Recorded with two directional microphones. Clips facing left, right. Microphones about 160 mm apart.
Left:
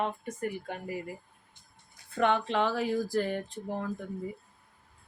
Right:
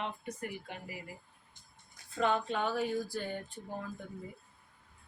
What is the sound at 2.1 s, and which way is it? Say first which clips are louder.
Speech: left 5 dB; 70° left (ahead or behind).